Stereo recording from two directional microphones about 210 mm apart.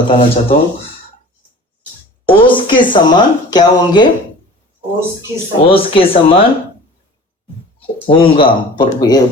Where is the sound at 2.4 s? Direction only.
25° left (ahead or behind).